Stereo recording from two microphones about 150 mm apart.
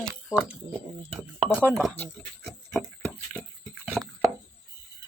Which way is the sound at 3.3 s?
5° left (ahead or behind).